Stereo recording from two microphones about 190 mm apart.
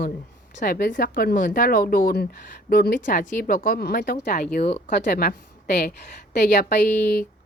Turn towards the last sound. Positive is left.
turn(degrees=45)  # may be behind; listen again after turning